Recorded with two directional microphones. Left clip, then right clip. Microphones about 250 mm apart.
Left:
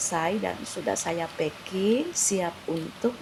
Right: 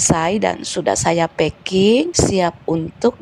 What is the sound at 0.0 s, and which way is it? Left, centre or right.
Speech, right.